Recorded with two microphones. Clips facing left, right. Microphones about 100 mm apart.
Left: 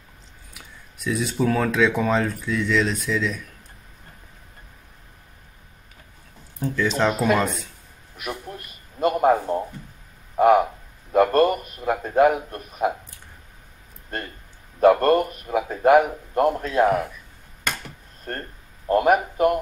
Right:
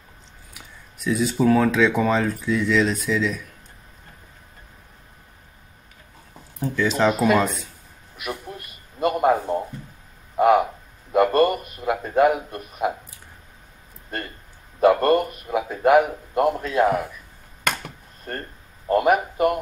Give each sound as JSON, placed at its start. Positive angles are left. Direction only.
{"t": 0.6, "sound": "speech", "side_deg": 0}
{"t": 6.6, "sound": "speech", "side_deg": 0}
{"t": 8.2, "sound": "a sound", "side_deg": 0}
{"t": 11.1, "sound": "a man's voice", "side_deg": 0}
{"t": 14.8, "sound": "speech", "side_deg": 0}
{"t": 18.9, "sound": "speech", "side_deg": 0}